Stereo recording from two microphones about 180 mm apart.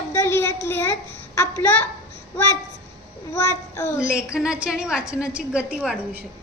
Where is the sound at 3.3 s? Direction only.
15° left (ahead or behind).